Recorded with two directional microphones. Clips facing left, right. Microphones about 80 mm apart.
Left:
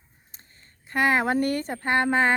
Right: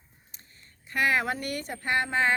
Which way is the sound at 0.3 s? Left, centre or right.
Left.